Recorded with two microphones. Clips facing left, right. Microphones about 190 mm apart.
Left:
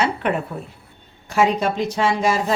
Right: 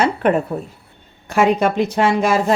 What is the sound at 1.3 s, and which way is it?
Speech, 60° right (ahead or behind).